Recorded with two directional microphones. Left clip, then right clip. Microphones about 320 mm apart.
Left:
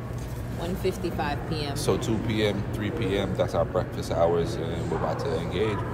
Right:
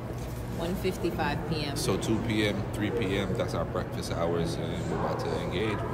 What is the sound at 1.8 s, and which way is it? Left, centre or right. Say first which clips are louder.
Speech: left 4 dB; centre.